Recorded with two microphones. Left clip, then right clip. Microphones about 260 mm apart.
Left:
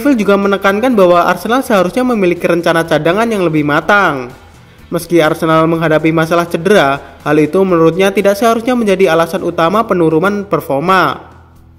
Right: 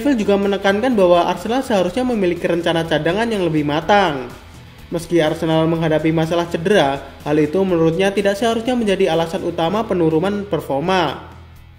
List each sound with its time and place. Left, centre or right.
0.0 s a man's voice: left